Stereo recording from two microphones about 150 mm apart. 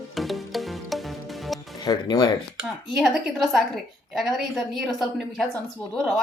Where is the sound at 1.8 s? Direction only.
25° left (ahead or behind).